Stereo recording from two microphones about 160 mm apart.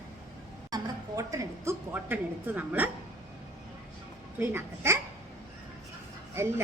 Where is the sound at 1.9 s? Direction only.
10° right (ahead or behind).